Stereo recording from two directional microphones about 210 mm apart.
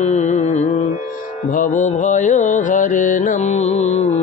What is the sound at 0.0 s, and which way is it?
Carnatic music, 30° left (ahead or behind).